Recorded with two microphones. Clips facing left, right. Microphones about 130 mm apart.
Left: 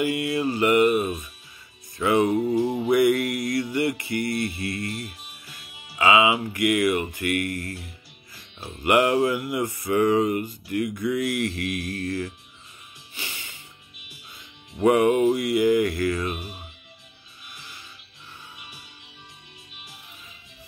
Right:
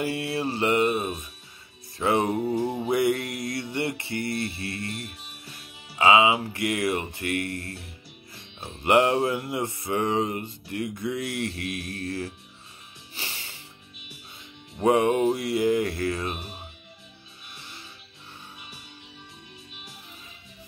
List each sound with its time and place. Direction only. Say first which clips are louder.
0.0 s music: left 4 dB; 30° right (ahead or behind)
5.9 s music: even; 30° right (ahead or behind)
14.8 s music: left 2 dB; 25° right (ahead or behind)
17.5 s music: even; 30° right (ahead or behind)